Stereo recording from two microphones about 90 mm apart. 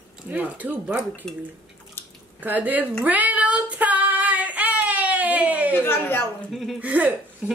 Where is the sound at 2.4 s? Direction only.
20° right (ahead or behind).